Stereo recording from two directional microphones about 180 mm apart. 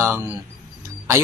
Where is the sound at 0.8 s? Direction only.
15° right (ahead or behind).